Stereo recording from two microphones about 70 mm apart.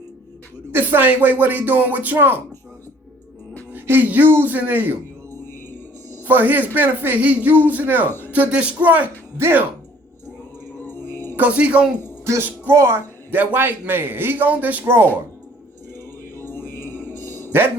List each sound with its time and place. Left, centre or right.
0.7 s a man's voice: right
3.7 s music: right
4.3 s a man's voice: right
5.3 s music: left
6.2 s a man's voice: right
9.4 s speech: right
11.1 s music: left
11.3 s a man's voice: right
12.2 s music: right
12.7 s speech: right
13.3 s a man's voice: right
16.6 s music: left